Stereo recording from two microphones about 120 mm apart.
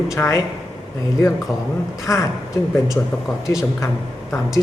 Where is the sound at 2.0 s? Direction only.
25° left (ahead or behind).